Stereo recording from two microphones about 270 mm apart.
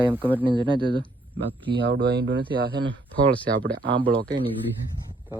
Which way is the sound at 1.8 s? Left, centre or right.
Right.